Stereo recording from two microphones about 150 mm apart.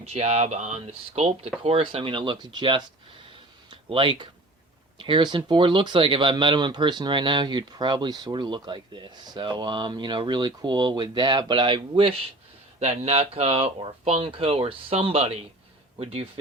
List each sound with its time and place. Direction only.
0.0 s speech: 45° right (ahead or behind)
3.7 s a sound: 35° right (ahead or behind)
4.9 s speech: 35° right (ahead or behind)